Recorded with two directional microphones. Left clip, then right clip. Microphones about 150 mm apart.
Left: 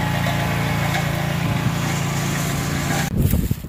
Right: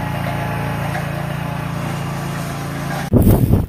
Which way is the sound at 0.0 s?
15° right (ahead or behind).